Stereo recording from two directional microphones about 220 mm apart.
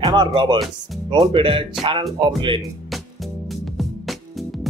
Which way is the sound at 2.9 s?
Centre (ahead or behind).